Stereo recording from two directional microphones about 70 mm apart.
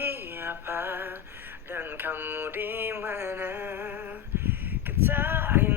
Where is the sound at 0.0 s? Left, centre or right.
Right.